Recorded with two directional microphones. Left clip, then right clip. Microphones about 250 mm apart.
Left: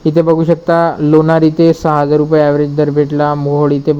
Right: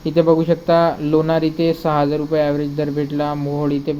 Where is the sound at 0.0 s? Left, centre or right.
Left.